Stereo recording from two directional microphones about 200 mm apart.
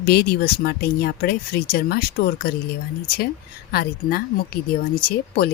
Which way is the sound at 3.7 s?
50° left (ahead or behind).